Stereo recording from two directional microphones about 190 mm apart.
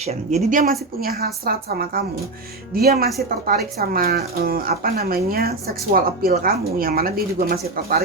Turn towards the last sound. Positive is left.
turn(degrees=-50)  # may be behind; listen again after turning